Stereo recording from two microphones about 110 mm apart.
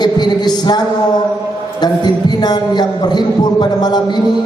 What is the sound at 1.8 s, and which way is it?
A man's voice, 40° left (ahead or behind).